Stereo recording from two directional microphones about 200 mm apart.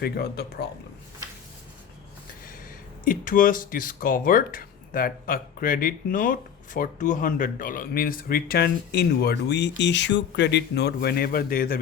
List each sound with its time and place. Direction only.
0.0 s speech: 50° left (ahead or behind)
3.0 s speech: 45° left (ahead or behind)